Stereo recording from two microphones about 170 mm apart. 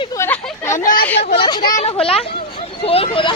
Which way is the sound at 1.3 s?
30° left (ahead or behind).